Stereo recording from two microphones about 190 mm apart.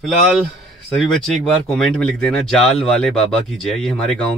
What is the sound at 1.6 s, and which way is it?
Speech, centre (ahead or behind).